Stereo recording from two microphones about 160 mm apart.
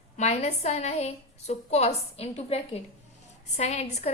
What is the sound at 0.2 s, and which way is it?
A woman's voice, 45° left (ahead or behind).